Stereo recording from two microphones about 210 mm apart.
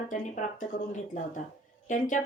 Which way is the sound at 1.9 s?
35° left (ahead or behind).